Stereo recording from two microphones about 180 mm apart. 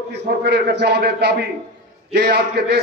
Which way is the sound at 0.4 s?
65° right (ahead or behind).